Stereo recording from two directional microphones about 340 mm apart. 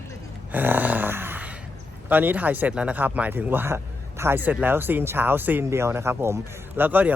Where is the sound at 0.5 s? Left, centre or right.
Centre.